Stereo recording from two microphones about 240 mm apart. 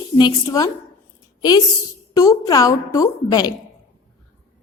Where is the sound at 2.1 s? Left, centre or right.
Centre.